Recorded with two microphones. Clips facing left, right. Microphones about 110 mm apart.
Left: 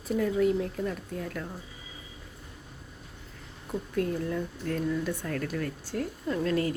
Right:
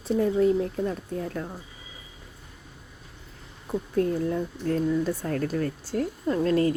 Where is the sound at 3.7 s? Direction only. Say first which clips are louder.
Right 5 dB; 30° right (ahead or behind).